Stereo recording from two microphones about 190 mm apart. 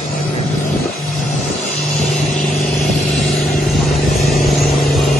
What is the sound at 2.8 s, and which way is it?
Vehicle, centre (ahead or behind).